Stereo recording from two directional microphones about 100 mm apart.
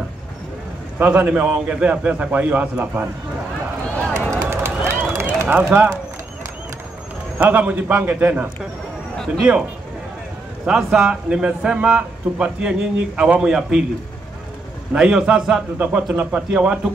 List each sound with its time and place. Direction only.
0.9 s a man's voice: 15° right (ahead or behind)
4.3 s run: 25° right (ahead or behind)
7.3 s a man's voice: 15° right (ahead or behind)
9.4 s a man's voice: 5° right (ahead or behind)
14.9 s a man's voice: 10° right (ahead or behind)